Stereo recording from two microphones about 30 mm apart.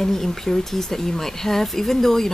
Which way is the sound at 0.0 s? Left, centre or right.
Centre.